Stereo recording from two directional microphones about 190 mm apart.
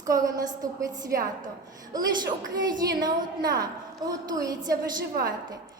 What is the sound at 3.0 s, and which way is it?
A woman's voice, 20° right (ahead or behind).